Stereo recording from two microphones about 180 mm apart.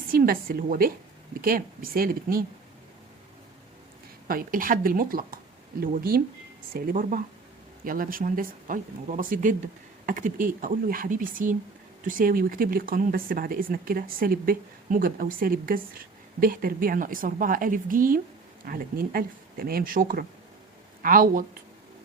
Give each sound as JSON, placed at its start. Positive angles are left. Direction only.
{"t": 0.1, "sound": "a woman's voice", "side_deg": -55}
{"t": 4.3, "sound": "speech", "side_deg": -50}